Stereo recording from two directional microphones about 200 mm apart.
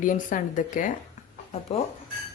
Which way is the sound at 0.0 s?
40° left (ahead or behind).